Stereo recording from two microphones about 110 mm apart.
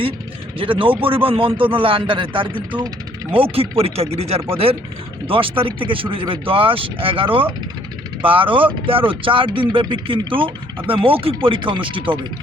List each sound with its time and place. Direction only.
0.6 s speech: 50° right (ahead or behind)